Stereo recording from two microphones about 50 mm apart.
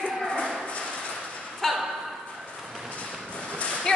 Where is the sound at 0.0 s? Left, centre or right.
Centre.